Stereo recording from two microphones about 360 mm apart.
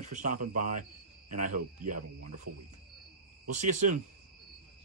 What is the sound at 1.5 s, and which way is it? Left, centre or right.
Speech, right.